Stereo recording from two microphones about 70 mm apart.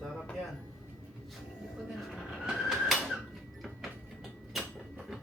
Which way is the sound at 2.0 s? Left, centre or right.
Centre.